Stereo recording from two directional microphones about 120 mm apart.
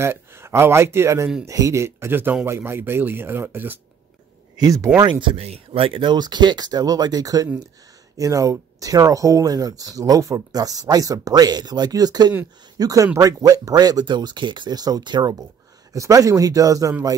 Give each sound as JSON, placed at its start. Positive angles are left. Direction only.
{"t": 0.0, "sound": "speech", "side_deg": -20}
{"t": 4.6, "sound": "speech", "side_deg": -30}
{"t": 5.2, "sound": "speech", "side_deg": -55}